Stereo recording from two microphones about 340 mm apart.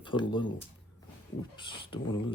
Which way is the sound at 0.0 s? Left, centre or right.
Centre.